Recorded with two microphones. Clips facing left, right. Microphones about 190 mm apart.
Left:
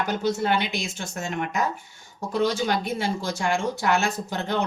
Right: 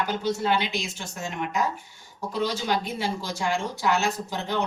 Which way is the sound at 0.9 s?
50° left (ahead or behind).